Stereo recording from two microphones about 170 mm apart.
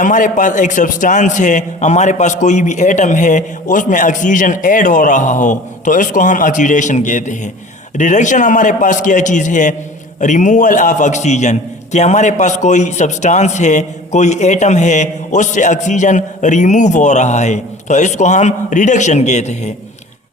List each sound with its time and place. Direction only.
0.0 s a man's voice: 50° left (ahead or behind)